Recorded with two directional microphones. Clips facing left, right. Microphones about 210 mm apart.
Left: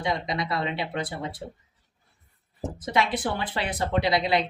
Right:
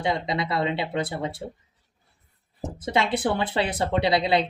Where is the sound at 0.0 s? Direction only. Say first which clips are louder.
Right 2 dB; 25° right (ahead or behind).